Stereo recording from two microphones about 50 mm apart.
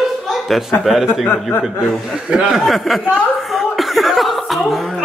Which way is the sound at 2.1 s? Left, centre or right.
Centre.